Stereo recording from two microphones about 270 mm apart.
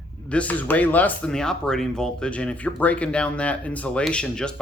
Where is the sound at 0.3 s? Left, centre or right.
Centre.